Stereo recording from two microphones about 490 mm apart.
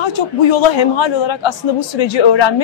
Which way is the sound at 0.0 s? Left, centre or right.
Left.